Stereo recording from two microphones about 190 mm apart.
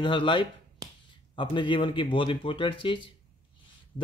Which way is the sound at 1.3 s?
25° left (ahead or behind).